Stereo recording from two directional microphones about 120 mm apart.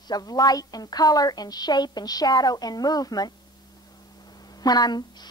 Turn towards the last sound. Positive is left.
turn(degrees=35)  # may be behind; listen again after turning